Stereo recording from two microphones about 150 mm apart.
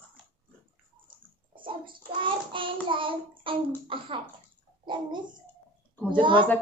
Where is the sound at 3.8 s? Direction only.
35° right (ahead or behind).